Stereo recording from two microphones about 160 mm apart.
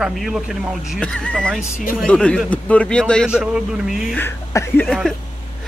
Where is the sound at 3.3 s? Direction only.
5° right (ahead or behind).